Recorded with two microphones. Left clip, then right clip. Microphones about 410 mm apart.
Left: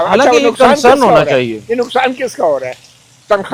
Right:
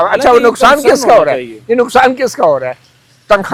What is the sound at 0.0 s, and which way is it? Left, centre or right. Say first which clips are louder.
Speech: right 1 dB; right.